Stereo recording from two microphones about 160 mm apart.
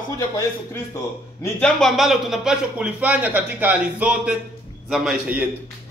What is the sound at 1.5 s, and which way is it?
Speech, 5° left (ahead or behind).